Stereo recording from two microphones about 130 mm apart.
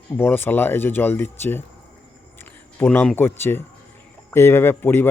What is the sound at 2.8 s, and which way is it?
Speech, 15° left (ahead or behind).